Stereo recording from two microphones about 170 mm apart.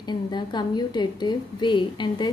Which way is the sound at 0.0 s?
25° left (ahead or behind).